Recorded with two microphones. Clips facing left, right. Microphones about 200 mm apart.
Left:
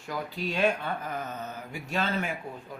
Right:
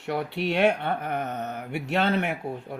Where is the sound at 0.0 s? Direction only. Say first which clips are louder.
Right 6 dB; 70° right (ahead or behind).